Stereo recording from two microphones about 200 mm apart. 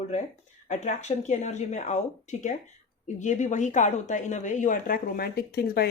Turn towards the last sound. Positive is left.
turn(degrees=50)  # may be behind; listen again after turning